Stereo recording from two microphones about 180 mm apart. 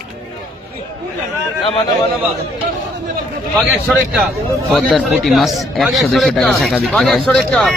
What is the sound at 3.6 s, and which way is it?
A man's voice, centre (ahead or behind).